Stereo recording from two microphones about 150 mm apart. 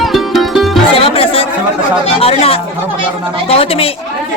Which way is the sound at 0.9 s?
40° left (ahead or behind).